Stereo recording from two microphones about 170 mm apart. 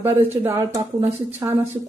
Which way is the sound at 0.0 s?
15° right (ahead or behind).